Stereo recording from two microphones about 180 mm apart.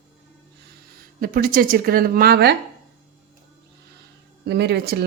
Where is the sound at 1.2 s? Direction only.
50° right (ahead or behind).